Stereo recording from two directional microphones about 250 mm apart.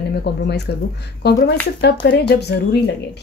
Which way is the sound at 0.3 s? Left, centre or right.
Left.